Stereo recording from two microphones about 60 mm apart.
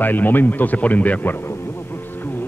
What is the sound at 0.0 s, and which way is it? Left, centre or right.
Speech, left.